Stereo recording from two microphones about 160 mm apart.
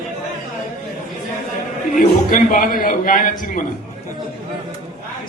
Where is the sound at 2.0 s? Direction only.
60° left (ahead or behind).